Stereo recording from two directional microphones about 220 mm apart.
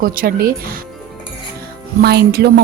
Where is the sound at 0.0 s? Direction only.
40° right (ahead or behind).